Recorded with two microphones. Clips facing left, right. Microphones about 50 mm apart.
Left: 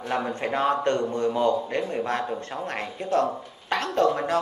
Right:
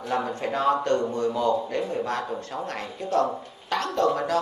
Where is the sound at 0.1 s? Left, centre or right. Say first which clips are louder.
Even; left.